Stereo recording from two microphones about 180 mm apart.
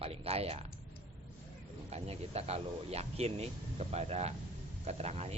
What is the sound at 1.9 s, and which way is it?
Speech, 35° right (ahead or behind).